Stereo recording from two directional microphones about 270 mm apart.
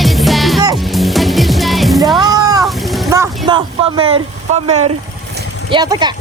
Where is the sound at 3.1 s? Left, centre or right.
Centre.